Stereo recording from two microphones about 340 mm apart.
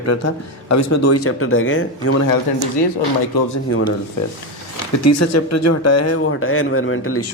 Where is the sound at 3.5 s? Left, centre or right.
Left.